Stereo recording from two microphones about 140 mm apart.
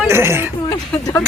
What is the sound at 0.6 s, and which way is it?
Speech, 20° left (ahead or behind).